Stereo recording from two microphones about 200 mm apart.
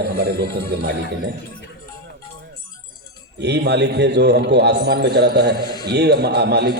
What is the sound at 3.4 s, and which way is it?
A man's voice, 55° right (ahead or behind).